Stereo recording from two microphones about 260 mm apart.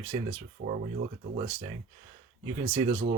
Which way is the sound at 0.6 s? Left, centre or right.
Right.